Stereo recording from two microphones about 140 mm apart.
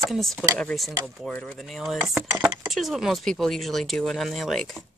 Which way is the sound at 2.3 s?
25° right (ahead or behind).